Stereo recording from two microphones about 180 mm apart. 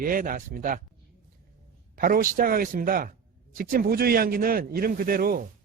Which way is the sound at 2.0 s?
50° right (ahead or behind).